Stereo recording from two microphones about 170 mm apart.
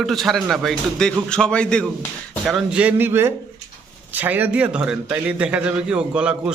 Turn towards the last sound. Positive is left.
turn(degrees=-5)  # may be behind; listen again after turning